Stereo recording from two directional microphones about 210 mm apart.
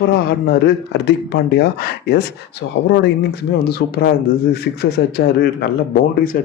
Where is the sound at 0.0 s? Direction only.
50° left (ahead or behind).